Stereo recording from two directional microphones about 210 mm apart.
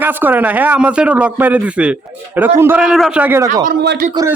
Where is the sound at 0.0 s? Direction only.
10° right (ahead or behind).